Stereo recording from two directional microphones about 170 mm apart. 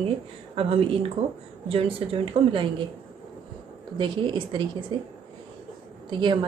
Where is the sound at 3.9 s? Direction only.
25° right (ahead or behind).